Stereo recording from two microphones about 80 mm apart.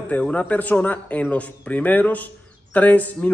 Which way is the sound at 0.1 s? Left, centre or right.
Centre.